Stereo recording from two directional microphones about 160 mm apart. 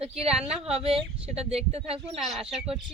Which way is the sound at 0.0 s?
40° right (ahead or behind).